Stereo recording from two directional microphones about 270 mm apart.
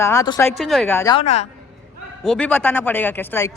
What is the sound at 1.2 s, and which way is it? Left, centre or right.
Speech, left.